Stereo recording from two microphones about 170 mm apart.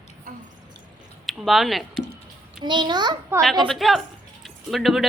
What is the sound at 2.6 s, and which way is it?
Speech, 25° right (ahead or behind).